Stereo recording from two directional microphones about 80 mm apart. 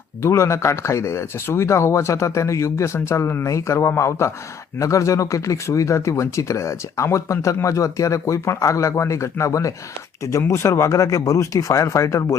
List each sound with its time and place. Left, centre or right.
0.2 s speech: left